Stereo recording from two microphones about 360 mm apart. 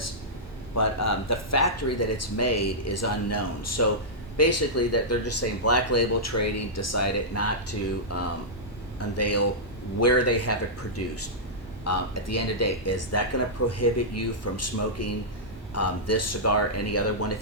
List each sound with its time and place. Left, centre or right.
0.7 s speech: left